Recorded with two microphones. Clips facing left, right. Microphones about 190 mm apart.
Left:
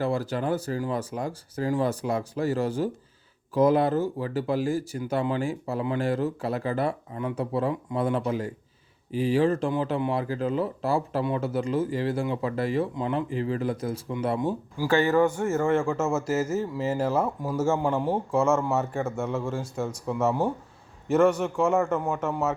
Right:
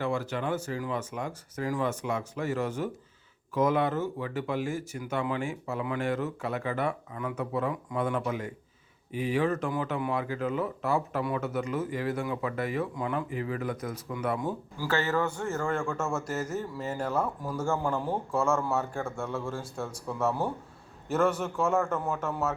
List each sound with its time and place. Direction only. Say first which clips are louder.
0.0 s speech: left 4 dB; 35° left (ahead or behind)
14.8 s a man's voice: left 7 dB; 15° left (ahead or behind)
15.5 s a man's voice: left 6 dB; 25° left (ahead or behind)
16.1 s a man's voice: left 6 dB; 5° left (ahead or behind)
16.6 s speech: left 6 dB; 90° left
16.9 s a man's voice: left 4 dB; 25° left (ahead or behind)
19.5 s speech: left 5 dB; centre (ahead or behind)
19.8 s a man's voice: left 4 dB; 20° left (ahead or behind)
21.1 s speech: left 6 dB; centre (ahead or behind)
21.3 s a man's voice: left 5 dB; 15° left (ahead or behind)
21.6 s speech: left 4 dB; centre (ahead or behind)
21.8 s a man's voice: left 4 dB; 20° left (ahead or behind)